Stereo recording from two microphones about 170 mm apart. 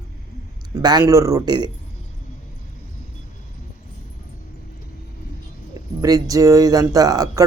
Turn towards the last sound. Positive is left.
turn(degrees=-20)  # may be behind; listen again after turning